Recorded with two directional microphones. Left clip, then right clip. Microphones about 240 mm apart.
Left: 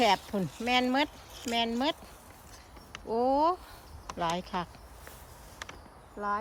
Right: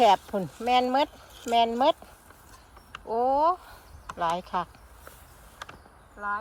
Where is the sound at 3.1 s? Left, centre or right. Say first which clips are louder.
Right 3 dB; centre.